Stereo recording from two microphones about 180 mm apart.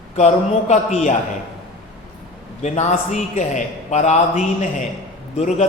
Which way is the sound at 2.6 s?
40° left (ahead or behind).